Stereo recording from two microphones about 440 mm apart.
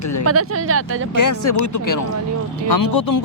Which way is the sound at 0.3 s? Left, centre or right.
Right.